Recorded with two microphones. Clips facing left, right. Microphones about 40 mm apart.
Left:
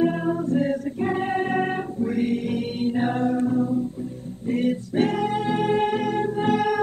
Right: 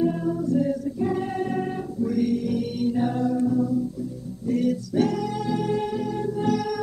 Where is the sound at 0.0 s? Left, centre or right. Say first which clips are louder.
Left 2 dB; left.